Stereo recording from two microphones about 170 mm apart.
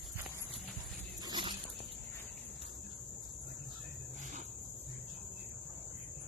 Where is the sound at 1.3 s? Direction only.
25° right (ahead or behind).